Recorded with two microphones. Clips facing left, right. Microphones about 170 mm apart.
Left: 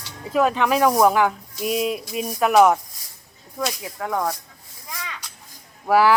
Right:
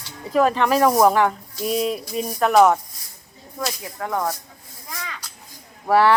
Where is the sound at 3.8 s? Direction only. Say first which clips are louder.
Right 1 dB; centre (ahead or behind).